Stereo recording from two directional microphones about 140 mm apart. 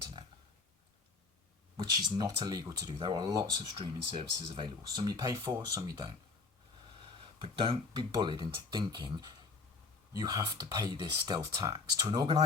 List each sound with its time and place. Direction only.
1.7 s speech: 30° right (ahead or behind)
7.2 s speech: 40° right (ahead or behind)